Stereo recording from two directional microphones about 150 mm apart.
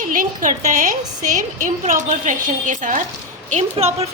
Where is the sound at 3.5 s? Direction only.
45° right (ahead or behind).